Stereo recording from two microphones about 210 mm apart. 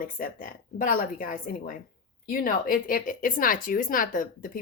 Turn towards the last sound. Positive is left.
turn(degrees=40)  # may be behind; listen again after turning